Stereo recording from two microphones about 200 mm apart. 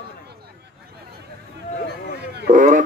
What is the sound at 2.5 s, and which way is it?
Speech, 40° right (ahead or behind).